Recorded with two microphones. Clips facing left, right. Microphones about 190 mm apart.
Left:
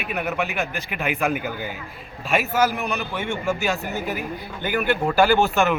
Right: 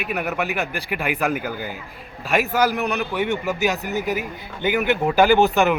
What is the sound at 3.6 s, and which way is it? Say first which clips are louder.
A man's voice: right 3 dB; 15° right (ahead or behind).